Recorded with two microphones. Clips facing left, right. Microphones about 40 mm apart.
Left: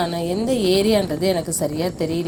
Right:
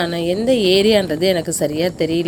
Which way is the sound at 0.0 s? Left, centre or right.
Right.